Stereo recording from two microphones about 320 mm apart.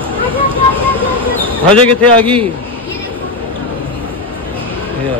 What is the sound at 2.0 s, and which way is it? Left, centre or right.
Speech, centre.